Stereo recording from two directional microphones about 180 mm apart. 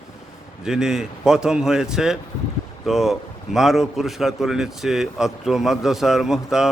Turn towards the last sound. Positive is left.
turn(degrees=-5)  # may be behind; listen again after turning